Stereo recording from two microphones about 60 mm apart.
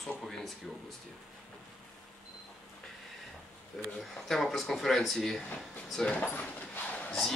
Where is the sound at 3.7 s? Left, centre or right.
Centre.